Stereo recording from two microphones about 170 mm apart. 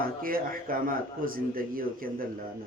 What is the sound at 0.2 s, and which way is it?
Speech, 55° right (ahead or behind).